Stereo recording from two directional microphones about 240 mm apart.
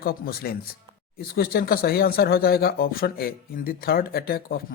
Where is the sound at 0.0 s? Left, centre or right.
Left.